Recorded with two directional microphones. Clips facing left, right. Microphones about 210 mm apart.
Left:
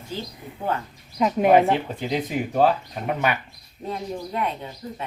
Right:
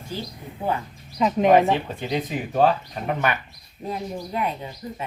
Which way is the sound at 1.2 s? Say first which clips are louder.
Even; 10° left (ahead or behind).